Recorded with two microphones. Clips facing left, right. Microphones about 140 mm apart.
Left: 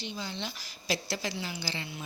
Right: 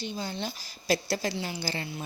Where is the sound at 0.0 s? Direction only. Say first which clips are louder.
Right 4 dB; 45° right (ahead or behind).